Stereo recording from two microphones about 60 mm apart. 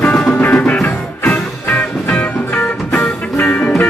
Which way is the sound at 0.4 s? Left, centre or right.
Left.